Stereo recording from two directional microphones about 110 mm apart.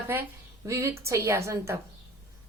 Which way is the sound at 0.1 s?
25° right (ahead or behind).